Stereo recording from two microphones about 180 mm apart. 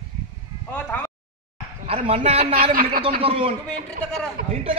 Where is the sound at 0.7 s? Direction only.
10° left (ahead or behind).